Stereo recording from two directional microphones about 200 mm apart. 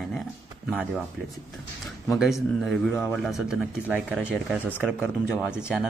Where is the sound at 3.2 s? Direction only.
Centre (ahead or behind).